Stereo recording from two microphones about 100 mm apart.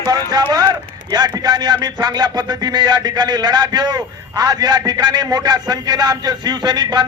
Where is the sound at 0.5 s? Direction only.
40° right (ahead or behind).